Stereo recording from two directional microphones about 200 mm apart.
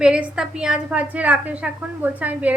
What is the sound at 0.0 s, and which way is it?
A woman's voice, 5° right (ahead or behind).